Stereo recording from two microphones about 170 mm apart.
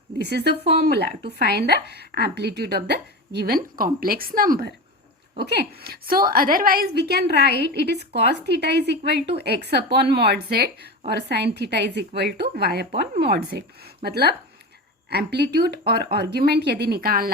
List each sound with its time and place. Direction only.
0.2 s a woman's voice: 70° right (ahead or behind)
5.5 s a woman's voice: 70° right (ahead or behind)